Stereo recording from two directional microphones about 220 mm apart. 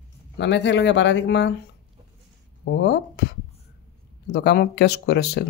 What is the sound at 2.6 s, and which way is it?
Speech, 50° left (ahead or behind).